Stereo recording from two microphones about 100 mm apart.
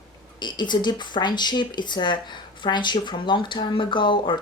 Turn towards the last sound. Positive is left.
turn(degrees=55)  # may be behind; listen again after turning